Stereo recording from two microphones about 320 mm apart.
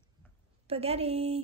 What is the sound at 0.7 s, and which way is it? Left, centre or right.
Speech, centre.